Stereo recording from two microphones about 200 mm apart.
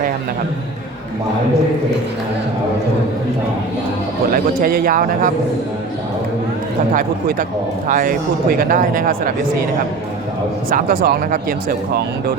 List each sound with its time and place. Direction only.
4.3 s speech: 45° right (ahead or behind)
6.9 s speech: 45° right (ahead or behind)
10.7 s speech: 45° right (ahead or behind)